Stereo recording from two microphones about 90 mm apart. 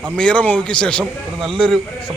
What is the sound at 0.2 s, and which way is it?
Speech, 10° left (ahead or behind).